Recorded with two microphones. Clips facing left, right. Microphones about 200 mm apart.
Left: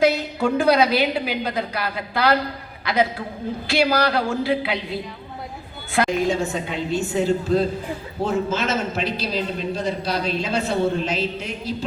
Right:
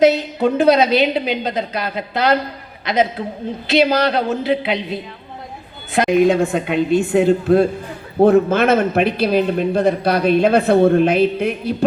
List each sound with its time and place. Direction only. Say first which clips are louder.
0.0 s a woman's voice: right 5 dB; 20° right (ahead or behind)
6.1 s a man's voice: right 8 dB; 55° right (ahead or behind)